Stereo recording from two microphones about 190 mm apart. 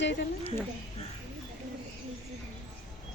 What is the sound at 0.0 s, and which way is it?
Speech, 70° left (ahead or behind).